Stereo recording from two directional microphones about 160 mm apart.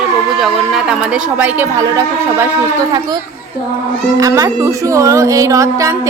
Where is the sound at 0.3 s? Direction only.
Centre (ahead or behind).